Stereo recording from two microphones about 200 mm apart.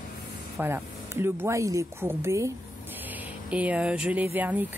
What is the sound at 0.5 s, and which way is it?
Speech, 10° right (ahead or behind).